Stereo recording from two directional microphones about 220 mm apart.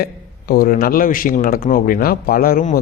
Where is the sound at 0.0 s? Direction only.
45° left (ahead or behind).